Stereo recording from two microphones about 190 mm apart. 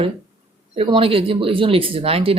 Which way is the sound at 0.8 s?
30° right (ahead or behind).